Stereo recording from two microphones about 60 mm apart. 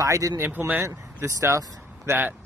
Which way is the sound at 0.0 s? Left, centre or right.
Right.